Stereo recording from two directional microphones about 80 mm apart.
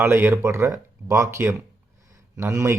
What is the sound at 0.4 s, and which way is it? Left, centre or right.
Speech, right.